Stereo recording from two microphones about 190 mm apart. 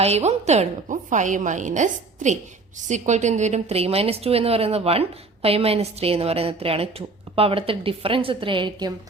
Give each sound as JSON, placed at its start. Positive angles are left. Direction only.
{"t": 0.0, "sound": "a woman's voice", "side_deg": -35}